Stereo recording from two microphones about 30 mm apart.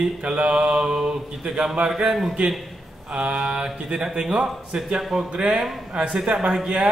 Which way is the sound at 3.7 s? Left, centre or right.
Right.